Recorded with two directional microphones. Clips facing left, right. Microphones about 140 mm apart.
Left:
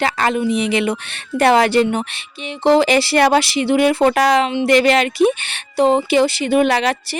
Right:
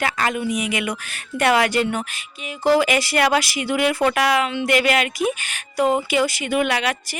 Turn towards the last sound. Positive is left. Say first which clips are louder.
# left 6 dB
turn(degrees=35)  # may be behind; listen again after turning